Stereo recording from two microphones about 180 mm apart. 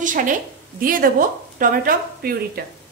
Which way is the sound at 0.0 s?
45° right (ahead or behind).